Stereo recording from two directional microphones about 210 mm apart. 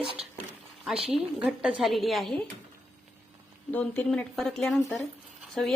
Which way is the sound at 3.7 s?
5° left (ahead or behind).